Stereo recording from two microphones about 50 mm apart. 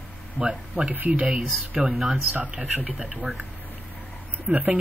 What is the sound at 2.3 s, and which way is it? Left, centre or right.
Speech, right.